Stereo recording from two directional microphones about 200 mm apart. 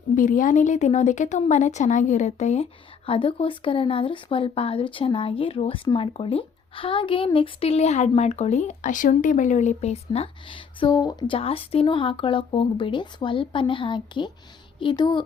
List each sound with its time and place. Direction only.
0.2 s speech: 40° left (ahead or behind); by 15.2 s 20° left (ahead or behind)